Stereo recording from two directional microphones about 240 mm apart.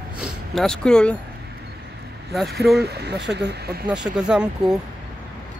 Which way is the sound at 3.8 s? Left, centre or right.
Centre.